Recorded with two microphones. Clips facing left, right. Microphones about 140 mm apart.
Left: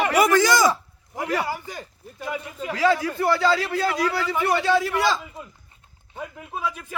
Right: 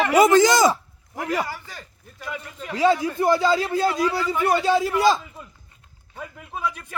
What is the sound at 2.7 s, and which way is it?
Speech, 20° right (ahead or behind).